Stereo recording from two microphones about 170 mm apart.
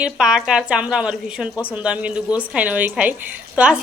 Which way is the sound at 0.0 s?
5° right (ahead or behind).